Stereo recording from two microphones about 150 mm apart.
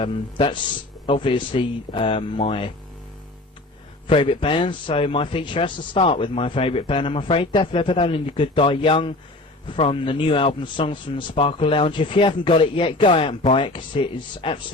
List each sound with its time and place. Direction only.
0.0 s speech: 35° left (ahead or behind)
4.0 s speech: 35° left (ahead or behind)